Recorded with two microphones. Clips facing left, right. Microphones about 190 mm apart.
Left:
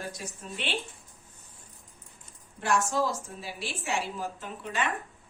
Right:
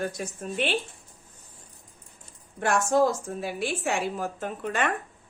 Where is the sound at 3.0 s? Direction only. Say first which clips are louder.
Right 7 dB; 50° right (ahead or behind).